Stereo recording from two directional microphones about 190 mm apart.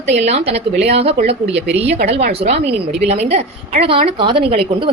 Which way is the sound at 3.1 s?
35° right (ahead or behind).